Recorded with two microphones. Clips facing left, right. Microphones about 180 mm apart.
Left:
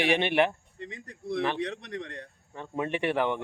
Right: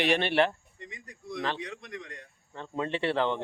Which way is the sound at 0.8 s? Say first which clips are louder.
Left 7 dB; 65° left (ahead or behind).